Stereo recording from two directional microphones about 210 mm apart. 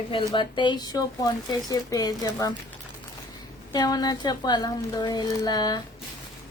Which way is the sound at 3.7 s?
20° left (ahead or behind).